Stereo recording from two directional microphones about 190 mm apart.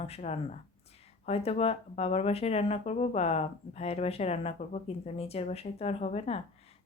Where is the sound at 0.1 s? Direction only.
35° left (ahead or behind).